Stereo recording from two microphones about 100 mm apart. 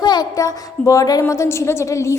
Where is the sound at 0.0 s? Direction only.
45° left (ahead or behind).